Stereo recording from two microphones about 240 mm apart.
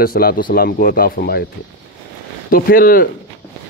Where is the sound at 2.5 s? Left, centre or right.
Left.